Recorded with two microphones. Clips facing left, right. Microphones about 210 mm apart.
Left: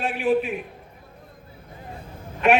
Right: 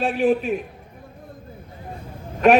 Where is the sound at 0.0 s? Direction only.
40° right (ahead or behind).